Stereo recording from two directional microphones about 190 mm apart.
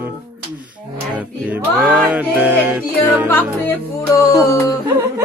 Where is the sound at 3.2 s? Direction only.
10° left (ahead or behind).